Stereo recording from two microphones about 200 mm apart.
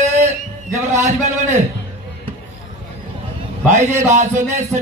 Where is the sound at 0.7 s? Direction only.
15° right (ahead or behind).